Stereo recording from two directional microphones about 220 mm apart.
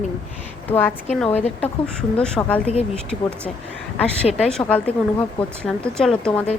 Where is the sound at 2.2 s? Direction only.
5° left (ahead or behind).